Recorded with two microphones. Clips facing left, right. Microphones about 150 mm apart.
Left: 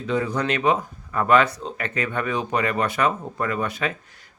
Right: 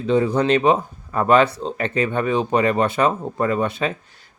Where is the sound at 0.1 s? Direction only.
30° right (ahead or behind).